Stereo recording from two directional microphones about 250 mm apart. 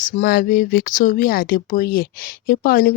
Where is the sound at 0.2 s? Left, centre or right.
Left.